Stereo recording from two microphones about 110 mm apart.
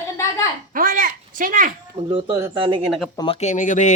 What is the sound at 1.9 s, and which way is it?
Speech, 50° right (ahead or behind).